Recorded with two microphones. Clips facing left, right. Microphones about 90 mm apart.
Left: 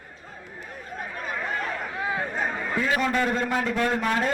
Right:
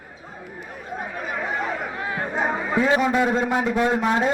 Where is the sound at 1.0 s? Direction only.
15° right (ahead or behind).